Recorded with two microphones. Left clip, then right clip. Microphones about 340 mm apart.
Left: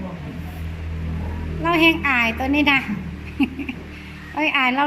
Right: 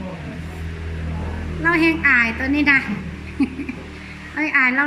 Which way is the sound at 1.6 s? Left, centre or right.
Centre.